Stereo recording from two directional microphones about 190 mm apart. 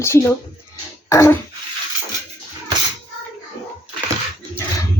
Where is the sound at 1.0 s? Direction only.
15° left (ahead or behind).